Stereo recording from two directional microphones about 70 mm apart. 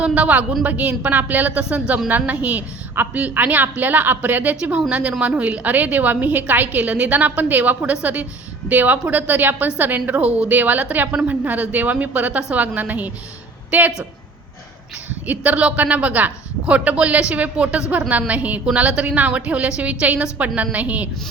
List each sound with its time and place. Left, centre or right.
0.0 s a woman's voice: centre
15.3 s speech: centre